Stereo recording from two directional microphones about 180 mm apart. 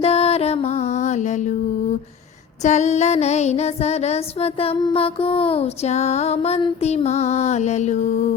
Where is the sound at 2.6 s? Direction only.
40° left (ahead or behind).